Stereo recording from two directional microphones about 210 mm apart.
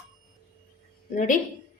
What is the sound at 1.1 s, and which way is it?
Speech, 40° left (ahead or behind).